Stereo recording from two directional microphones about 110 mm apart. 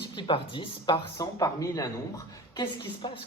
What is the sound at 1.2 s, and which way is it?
A woman's voice, 35° left (ahead or behind).